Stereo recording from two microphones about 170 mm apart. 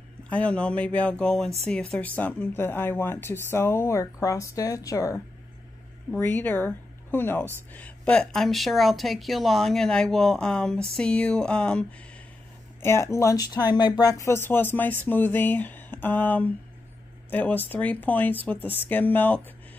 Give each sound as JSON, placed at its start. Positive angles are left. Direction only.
{"t": 0.2, "sound": "a woman's voice", "side_deg": 10}
{"t": 12.8, "sound": "a woman's voice", "side_deg": 15}